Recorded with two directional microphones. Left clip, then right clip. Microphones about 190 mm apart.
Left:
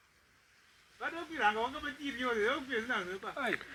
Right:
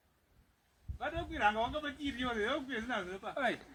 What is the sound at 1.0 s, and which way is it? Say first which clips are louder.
Speech: even; 25° right (ahead or behind).